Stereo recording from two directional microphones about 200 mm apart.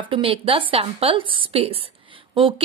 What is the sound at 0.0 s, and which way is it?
A woman's voice, 25° right (ahead or behind).